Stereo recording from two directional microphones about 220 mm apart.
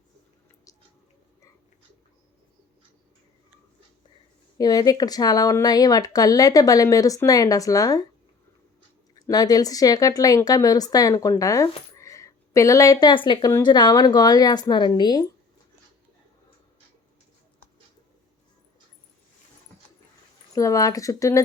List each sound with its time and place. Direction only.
4.5 s speech: 15° left (ahead or behind)
9.1 s speech: 15° left (ahead or behind)
20.6 s speech: 15° left (ahead or behind)